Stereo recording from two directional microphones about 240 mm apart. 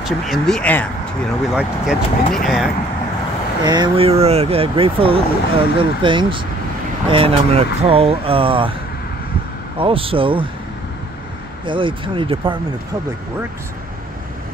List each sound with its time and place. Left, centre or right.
0.0 s speech: centre
3.6 s speech: centre
9.8 s speech: right
11.6 s speech: right